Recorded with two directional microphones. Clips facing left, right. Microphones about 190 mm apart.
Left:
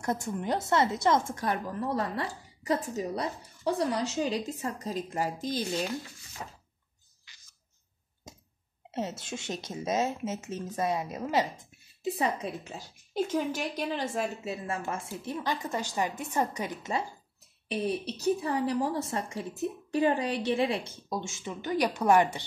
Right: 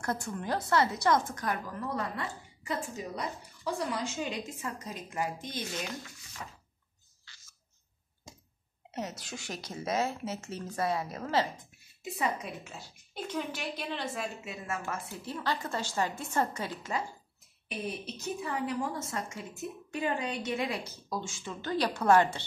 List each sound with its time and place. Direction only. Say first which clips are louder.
0.0 s speech: left 3 dB; 20° left (ahead or behind); by 5.9 s 35° left (ahead or behind)
7.3 s a sound: right 2 dB; 15° left (ahead or behind)
8.9 s speech: left 4 dB; 25° left (ahead or behind)
12.0 s speech: left 4 dB; 35° left (ahead or behind)
15.2 s a woman's voice: left 1 dB; 15° left (ahead or behind)
17.6 s speech: left 7 dB; 35° left (ahead or behind); by 22.4 s 15° left (ahead or behind)